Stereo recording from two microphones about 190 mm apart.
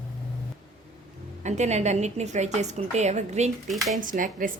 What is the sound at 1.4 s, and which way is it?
A woman's voice, 40° right (ahead or behind).